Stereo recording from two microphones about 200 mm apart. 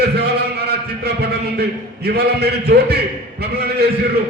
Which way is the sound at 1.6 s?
55° right (ahead or behind).